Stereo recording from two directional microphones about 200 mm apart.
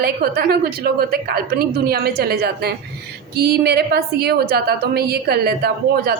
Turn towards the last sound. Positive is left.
turn(degrees=-50)  # may be behind; listen again after turning